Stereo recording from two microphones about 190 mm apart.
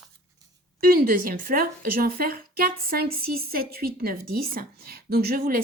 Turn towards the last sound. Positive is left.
turn(degrees=-55)  # may be behind; listen again after turning